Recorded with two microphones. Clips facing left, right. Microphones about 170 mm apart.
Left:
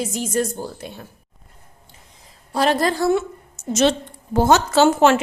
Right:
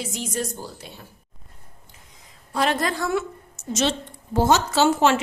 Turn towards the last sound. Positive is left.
turn(degrees=50)  # may be behind; listen again after turning